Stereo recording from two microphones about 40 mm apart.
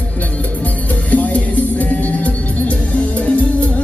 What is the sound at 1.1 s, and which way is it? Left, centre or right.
Music, left.